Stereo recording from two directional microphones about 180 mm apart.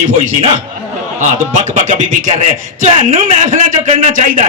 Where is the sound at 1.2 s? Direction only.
45° right (ahead or behind).